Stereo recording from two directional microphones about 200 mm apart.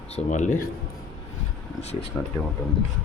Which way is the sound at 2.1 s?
10° left (ahead or behind).